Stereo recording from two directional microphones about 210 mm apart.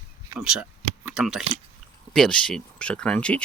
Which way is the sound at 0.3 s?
5° right (ahead or behind).